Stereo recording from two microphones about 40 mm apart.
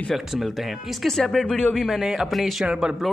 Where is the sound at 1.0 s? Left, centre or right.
Centre.